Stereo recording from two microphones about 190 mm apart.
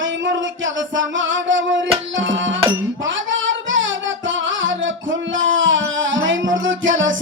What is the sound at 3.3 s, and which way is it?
Child singing, 85° right.